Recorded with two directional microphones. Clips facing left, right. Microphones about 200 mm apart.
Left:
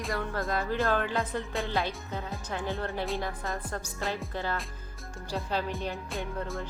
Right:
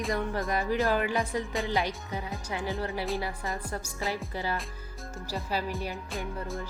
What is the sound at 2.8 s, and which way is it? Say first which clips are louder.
Music: right 1 dB; 5° right (ahead or behind).